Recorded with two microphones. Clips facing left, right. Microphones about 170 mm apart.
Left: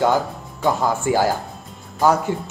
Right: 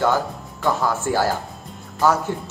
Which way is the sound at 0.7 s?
15° left (ahead or behind).